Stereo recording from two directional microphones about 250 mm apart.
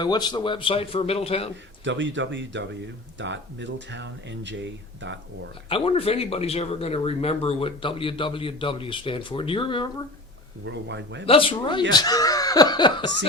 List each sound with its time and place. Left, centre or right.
0.0 s speech: centre
1.8 s speech: right
5.6 s speech: left
10.7 s speech: right
11.3 s speech: left